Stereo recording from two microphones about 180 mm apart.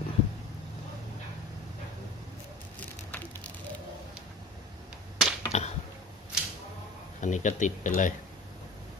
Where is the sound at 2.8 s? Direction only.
10° left (ahead or behind).